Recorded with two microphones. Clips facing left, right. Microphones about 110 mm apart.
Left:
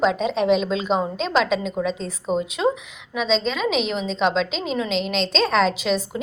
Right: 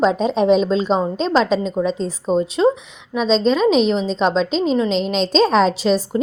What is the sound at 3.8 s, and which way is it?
Speech, 35° right (ahead or behind).